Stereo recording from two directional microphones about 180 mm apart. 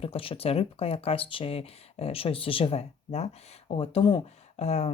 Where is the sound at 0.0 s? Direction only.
30° left (ahead or behind).